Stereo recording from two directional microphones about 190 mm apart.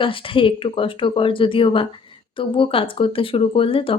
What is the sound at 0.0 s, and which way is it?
Speech, 25° left (ahead or behind).